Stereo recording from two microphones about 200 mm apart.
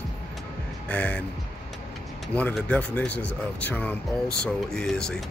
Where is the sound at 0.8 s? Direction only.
5° left (ahead or behind).